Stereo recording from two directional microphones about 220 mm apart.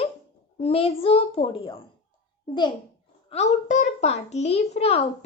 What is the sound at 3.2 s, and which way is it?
A child's voice, 30° left (ahead or behind).